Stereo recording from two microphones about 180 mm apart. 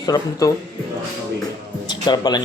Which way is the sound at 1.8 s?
25° left (ahead or behind).